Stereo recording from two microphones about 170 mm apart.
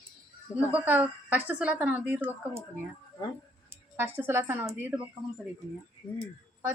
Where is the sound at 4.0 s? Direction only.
10° right (ahead or behind).